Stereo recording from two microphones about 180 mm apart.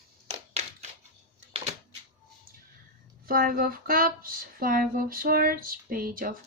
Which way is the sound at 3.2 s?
55° right (ahead or behind).